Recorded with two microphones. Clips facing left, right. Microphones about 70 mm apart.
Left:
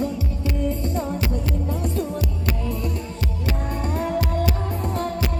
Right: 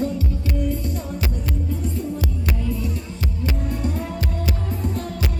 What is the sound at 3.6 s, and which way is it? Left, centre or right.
Music, left.